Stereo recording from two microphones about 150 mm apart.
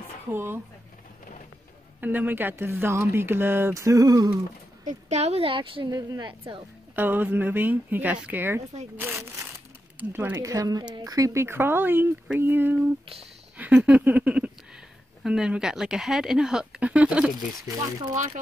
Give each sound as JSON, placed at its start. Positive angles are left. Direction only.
{"t": 0.3, "sound": "speech", "side_deg": -15}
{"t": 2.0, "sound": "speech", "side_deg": -10}
{"t": 4.8, "sound": "a woman's voice", "side_deg": -45}
{"t": 7.0, "sound": "speech", "side_deg": -15}
{"t": 10.3, "sound": "a woman's voice", "side_deg": -20}
{"t": 13.6, "sound": "a sound", "side_deg": -10}
{"t": 15.2, "sound": "speech", "side_deg": -5}
{"t": 18.1, "sound": "speech", "side_deg": -55}